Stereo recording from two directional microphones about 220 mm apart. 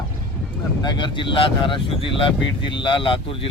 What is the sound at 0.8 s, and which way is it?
Speech, 20° left (ahead or behind).